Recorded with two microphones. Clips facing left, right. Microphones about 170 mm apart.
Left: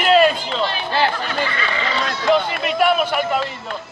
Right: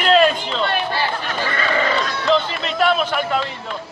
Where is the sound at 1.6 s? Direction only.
50° right (ahead or behind).